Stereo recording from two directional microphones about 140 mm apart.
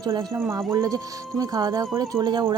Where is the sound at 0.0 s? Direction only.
30° right (ahead or behind).